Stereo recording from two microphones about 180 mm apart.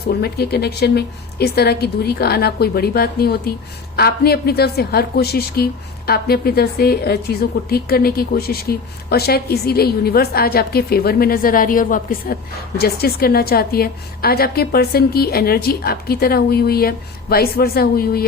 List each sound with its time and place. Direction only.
0.2 s a woman's voice: 65° left (ahead or behind)